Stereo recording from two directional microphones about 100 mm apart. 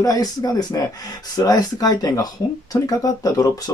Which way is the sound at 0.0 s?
40° left (ahead or behind).